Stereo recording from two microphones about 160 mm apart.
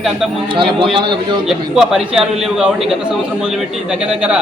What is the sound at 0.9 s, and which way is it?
Speech, 30° right (ahead or behind).